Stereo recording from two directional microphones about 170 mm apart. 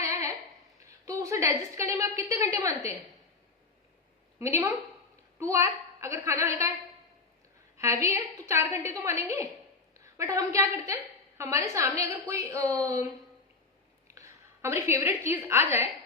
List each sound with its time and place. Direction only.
0.0 s a sound: 15° right (ahead or behind)
0.9 s a woman's voice: 20° right (ahead or behind)
4.4 s a woman's voice: 15° right (ahead or behind)
7.8 s a woman's voice: 15° right (ahead or behind)
14.1 s a woman's voice: 15° right (ahead or behind)